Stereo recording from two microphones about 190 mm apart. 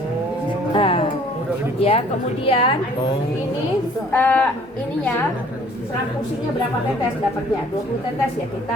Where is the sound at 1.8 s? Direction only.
30° left (ahead or behind).